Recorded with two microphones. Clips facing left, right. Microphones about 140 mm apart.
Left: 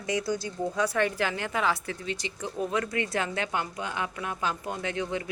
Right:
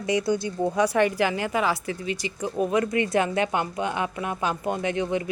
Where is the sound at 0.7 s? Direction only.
15° right (ahead or behind).